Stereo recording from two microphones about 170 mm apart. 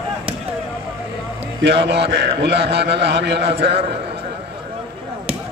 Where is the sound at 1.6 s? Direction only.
80° right.